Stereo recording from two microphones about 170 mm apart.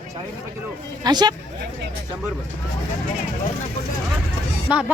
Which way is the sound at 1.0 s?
25° right (ahead or behind).